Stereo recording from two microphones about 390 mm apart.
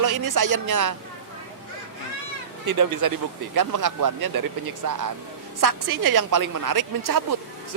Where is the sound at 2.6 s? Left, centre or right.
Right.